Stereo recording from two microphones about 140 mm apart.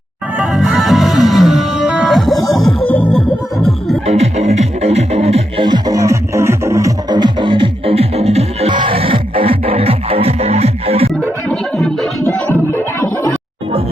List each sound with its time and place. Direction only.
0.3 s music: 5° right (ahead or behind)
4.0 s music: 50° right (ahead or behind)
5.6 s music: 30° right (ahead or behind); by 8.7 s 50° right (ahead or behind)
8.7 s music: 35° right (ahead or behind)
12.2 s music: 15° left (ahead or behind)